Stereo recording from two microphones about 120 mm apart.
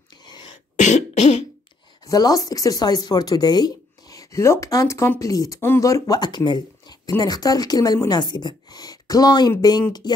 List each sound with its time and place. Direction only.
0.2 s throat clearing: 40° left (ahead or behind)
0.7 s cough: 80° left
2.0 s speech: 30° left (ahead or behind)